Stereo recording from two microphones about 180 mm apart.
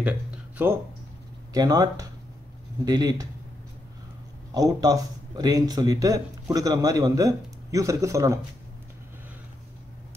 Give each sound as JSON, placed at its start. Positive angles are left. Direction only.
{"t": 0.6, "sound": "speech", "side_deg": -10}
{"t": 4.6, "sound": "speech", "side_deg": -20}